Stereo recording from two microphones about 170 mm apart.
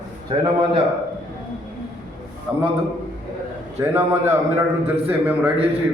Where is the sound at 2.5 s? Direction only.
5° right (ahead or behind).